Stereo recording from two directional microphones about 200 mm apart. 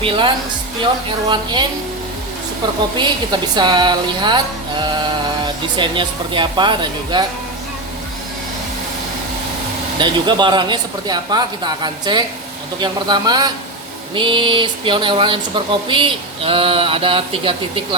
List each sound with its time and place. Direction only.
0.0 s speech: 25° right (ahead or behind)
3.0 s speech: 20° right (ahead or behind)
10.0 s speech: 25° right (ahead or behind)